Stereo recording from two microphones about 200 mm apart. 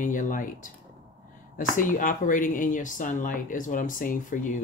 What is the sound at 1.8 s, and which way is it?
Speech, 40° left (ahead or behind).